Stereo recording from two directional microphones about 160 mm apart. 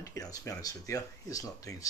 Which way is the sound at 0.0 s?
20° left (ahead or behind).